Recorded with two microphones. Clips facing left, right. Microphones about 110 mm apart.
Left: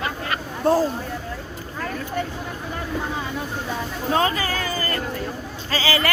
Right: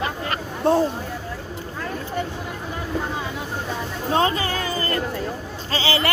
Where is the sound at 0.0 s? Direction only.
25° right (ahead or behind).